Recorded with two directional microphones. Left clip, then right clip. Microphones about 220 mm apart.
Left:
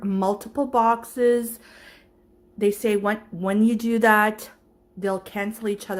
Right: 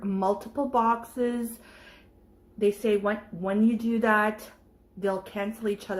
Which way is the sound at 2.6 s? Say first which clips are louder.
Left 3 dB; 35° left (ahead or behind).